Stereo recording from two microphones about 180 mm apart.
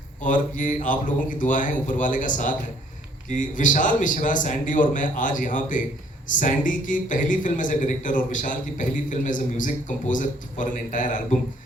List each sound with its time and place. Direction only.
0.2 s a man's voice: 45° left (ahead or behind)